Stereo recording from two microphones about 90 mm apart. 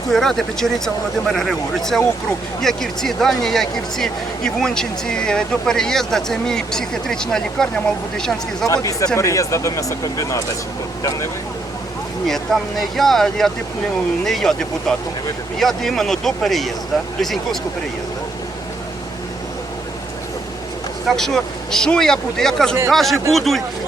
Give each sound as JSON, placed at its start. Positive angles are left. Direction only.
{"t": 0.1, "sound": "speech", "side_deg": 5}
{"t": 8.6, "sound": "speech", "side_deg": 40}
{"t": 12.5, "sound": "speech", "side_deg": 0}
{"t": 21.1, "sound": "speech", "side_deg": 5}